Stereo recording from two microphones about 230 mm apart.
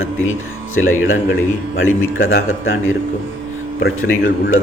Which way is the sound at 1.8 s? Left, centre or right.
Left.